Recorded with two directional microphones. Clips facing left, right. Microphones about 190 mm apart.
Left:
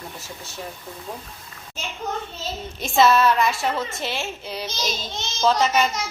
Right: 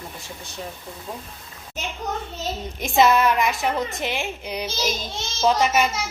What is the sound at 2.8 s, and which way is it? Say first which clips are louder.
A woman's voice: even; 15° right (ahead or behind).